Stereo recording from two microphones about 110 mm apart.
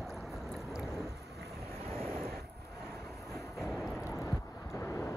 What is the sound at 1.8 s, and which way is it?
Waves, 60° right (ahead or behind).